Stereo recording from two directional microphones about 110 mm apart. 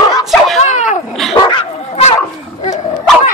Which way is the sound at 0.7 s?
90° left.